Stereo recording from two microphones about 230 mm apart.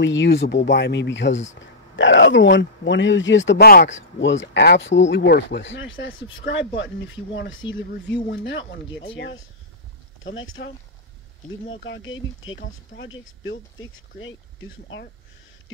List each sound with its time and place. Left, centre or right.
0.0 s speech: left